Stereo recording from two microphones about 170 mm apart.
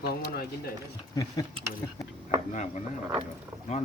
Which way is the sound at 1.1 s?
25° left (ahead or behind).